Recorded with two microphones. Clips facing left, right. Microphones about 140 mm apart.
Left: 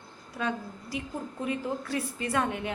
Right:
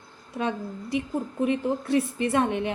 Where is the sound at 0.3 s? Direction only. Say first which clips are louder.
Right 4 dB; 20° right (ahead or behind).